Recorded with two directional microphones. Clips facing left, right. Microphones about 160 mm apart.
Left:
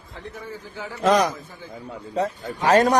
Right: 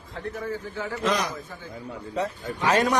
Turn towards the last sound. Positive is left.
turn(degrees=40)  # may be behind; listen again after turning